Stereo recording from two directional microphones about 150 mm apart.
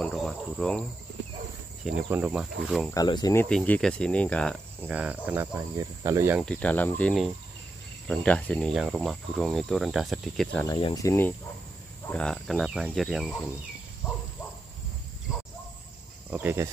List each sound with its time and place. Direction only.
0.0 s speech: centre (ahead or behind)
1.9 s speech: 10° right (ahead or behind)
2.9 s speech: 25° left (ahead or behind)
3.3 s speech: 10° left (ahead or behind)
4.8 s speech: 10° right (ahead or behind)
5.5 s cricket: 20° right (ahead or behind)
6.4 s speech: 10° left (ahead or behind)
10.8 s speech: 25° left (ahead or behind)
12.1 s speech: 5° left (ahead or behind)
16.3 s cricket: 15° right (ahead or behind)